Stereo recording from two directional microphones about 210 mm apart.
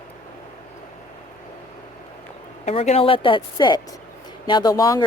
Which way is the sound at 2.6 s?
30° left (ahead or behind).